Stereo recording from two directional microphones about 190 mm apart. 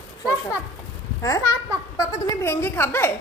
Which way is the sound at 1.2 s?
20° left (ahead or behind).